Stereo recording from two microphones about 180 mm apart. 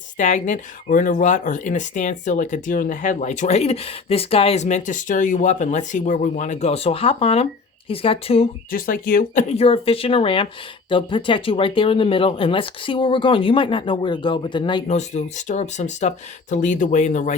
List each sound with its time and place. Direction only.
0.2 s speech: 40° left (ahead or behind)
8.7 s speech: 55° left (ahead or behind); by 14.9 s 25° left (ahead or behind)
14.9 s speech: 40° left (ahead or behind)